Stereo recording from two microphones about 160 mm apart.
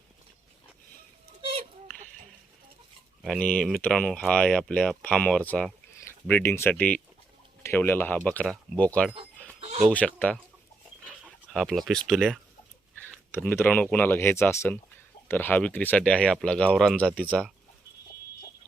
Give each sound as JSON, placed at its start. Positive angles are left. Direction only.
{"t": 1.4, "sound": "children playing", "side_deg": -35}
{"t": 3.2, "sound": "speech", "side_deg": 5}
{"t": 9.6, "sound": "a sound", "side_deg": -40}
{"t": 9.8, "sound": "speech", "side_deg": 10}
{"t": 11.5, "sound": "speech", "side_deg": 0}
{"t": 13.3, "sound": "speech", "side_deg": 10}